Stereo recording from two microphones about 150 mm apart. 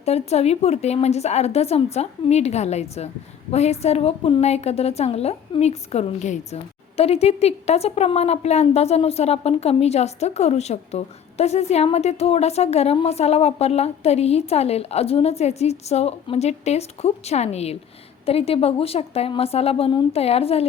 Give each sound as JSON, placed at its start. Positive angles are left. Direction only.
{"t": 0.0, "sound": "a woman's voice", "side_deg": 45}